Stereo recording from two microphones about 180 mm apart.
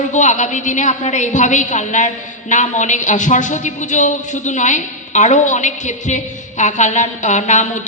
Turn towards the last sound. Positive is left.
turn(degrees=40)  # may be behind; listen again after turning